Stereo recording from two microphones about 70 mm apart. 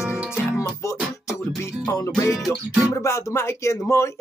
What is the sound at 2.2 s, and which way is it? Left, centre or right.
Music, left.